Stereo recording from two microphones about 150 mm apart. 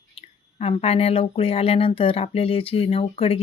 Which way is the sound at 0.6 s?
40° left (ahead or behind).